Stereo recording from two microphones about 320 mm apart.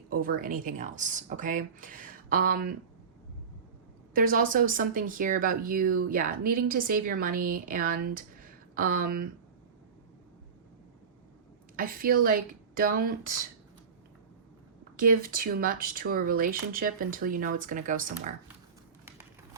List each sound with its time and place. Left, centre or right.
0.1 s speech: right
4.1 s speech: right
11.8 s speech: right
14.9 s speech: right